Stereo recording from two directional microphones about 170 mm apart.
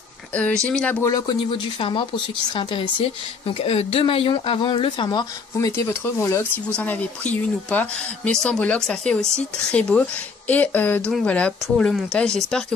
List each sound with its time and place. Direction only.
0.3 s speech: 10° left (ahead or behind)
1.1 s a woman's voice: 25° left (ahead or behind); by 12.6 s 5° left (ahead or behind)